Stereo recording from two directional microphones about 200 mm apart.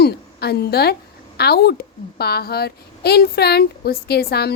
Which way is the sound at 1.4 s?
55° left (ahead or behind).